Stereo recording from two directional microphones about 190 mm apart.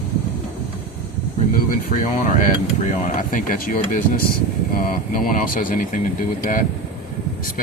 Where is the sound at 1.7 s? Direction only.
45° left (ahead or behind).